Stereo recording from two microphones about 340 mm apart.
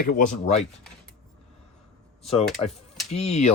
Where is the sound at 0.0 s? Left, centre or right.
Left.